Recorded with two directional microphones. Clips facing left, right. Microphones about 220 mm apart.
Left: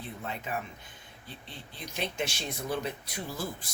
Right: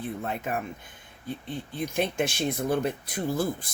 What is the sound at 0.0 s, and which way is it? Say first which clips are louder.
Speech: right 7 dB; 50° right (ahead or behind).